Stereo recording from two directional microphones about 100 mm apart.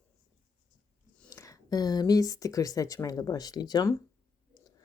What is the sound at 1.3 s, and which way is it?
Speech, 30° left (ahead or behind).